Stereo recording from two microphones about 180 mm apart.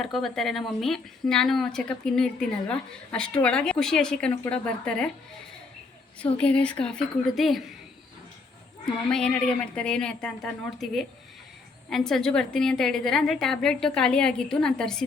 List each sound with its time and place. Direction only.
0.0 s speech: centre (ahead or behind)
6.3 s speech: 5° left (ahead or behind)
9.0 s speech: 5° left (ahead or behind)